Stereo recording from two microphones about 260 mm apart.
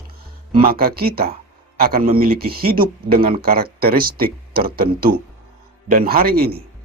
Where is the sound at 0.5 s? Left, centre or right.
Right.